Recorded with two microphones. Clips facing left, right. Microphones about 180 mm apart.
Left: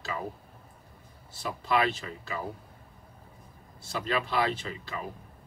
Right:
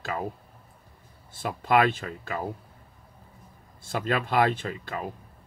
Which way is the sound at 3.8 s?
50° right (ahead or behind).